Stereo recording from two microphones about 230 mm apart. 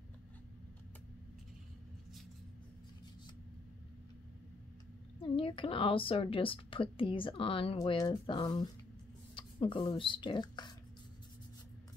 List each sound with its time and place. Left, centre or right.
5.2 s a woman's voice: left